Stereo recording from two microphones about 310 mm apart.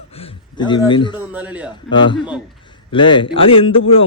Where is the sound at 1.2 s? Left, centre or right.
Centre.